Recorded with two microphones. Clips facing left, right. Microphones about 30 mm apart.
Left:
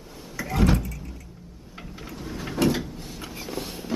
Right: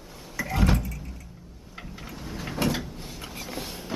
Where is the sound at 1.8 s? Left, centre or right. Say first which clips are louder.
Left 2 dB; centre.